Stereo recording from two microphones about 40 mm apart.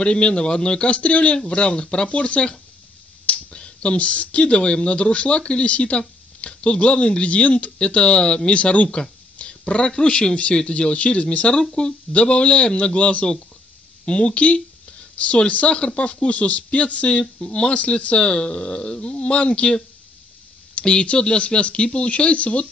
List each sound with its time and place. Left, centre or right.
0.0 s speech: left
17.2 s speech: left